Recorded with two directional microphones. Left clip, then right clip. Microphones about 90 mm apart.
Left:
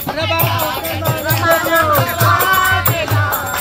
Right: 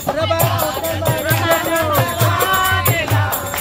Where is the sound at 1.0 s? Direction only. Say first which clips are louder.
Even; centre (ahead or behind).